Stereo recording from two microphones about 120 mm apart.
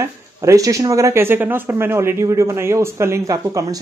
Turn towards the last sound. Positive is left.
turn(degrees=-30)  # may be behind; listen again after turning